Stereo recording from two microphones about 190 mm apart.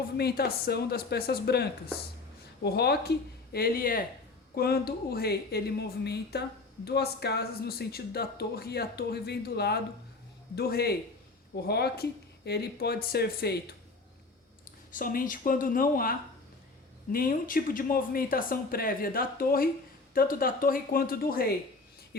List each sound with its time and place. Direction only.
0.2 s speech: 55° left (ahead or behind)
14.9 s speech: 45° left (ahead or behind)